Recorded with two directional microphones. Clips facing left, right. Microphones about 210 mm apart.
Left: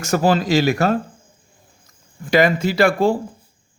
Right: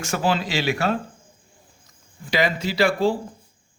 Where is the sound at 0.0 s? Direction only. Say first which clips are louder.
Left 6 dB; 40° left (ahead or behind).